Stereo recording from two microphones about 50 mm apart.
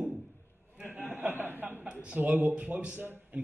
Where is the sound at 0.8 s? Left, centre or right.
Right.